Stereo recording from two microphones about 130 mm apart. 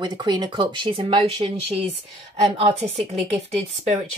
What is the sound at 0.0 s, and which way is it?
Speech, 35° right (ahead or behind).